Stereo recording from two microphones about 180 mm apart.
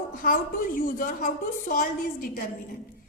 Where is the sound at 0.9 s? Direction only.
50° left (ahead or behind).